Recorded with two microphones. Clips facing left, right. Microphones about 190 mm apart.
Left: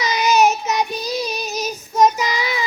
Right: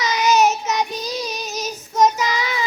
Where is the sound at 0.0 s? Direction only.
10° left (ahead or behind).